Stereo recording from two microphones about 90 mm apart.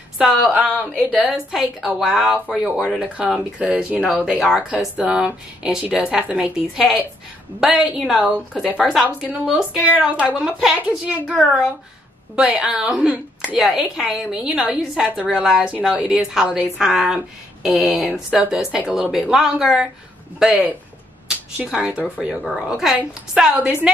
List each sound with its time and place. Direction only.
0.2 s speech: centre (ahead or behind)
0.5 s speech: 15° right (ahead or behind)
1.3 s speech: 5° right (ahead or behind)
10.4 s speech: 5° right (ahead or behind)